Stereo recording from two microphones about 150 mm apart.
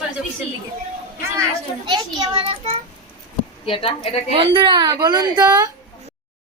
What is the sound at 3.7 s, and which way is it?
Speech, 35° left (ahead or behind).